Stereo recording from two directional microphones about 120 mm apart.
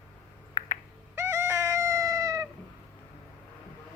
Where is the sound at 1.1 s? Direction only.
20° right (ahead or behind).